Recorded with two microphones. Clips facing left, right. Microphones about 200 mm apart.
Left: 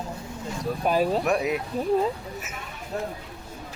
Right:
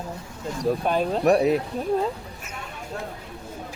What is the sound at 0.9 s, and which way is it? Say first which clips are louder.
Speech: left 5 dB; 5° left (ahead or behind).